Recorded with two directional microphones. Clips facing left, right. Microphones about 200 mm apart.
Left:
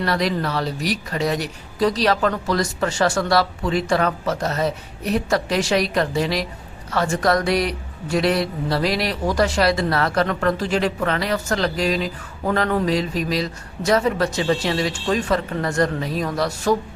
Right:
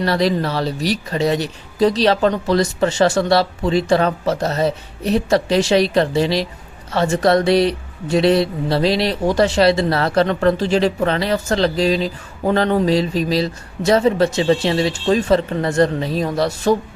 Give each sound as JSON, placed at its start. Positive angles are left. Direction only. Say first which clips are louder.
{"t": 0.0, "sound": "speech", "louder": "right 4 dB", "side_deg": -30}